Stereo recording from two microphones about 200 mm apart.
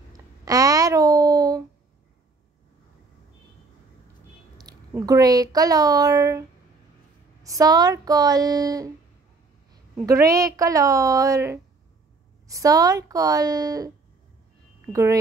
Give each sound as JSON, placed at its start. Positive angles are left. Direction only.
{"t": 0.5, "sound": "a sound", "side_deg": -15}
{"t": 4.6, "sound": "a woman's voice", "side_deg": -20}
{"t": 7.4, "sound": "speech", "side_deg": -15}
{"t": 10.0, "sound": "speech", "side_deg": -15}